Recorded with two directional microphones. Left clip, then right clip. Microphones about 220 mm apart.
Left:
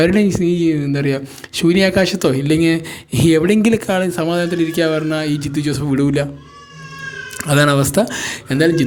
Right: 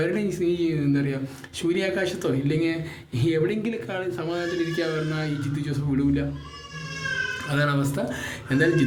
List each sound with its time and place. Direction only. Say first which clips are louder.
0.0 s speech: left 10 dB; 45° left (ahead or behind)
7.4 s speech: left 16 dB; 50° left (ahead or behind)